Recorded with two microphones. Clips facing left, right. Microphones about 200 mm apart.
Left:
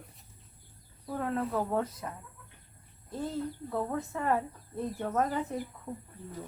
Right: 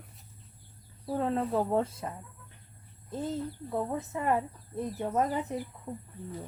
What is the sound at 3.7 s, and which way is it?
Speech, 20° right (ahead or behind).